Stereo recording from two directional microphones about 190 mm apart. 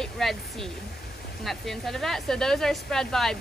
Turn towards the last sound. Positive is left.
turn(degrees=5)  # may be behind; listen again after turning